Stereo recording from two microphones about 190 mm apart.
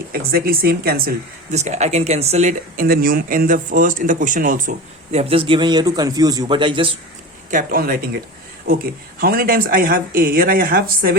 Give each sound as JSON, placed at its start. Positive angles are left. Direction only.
{"t": 0.1, "sound": "speech", "side_deg": -55}
{"t": 1.5, "sound": "speech", "side_deg": -35}
{"t": 5.1, "sound": "a man's voice", "side_deg": -30}
{"t": 7.5, "sound": "speech", "side_deg": -50}
{"t": 9.2, "sound": "speech", "side_deg": -50}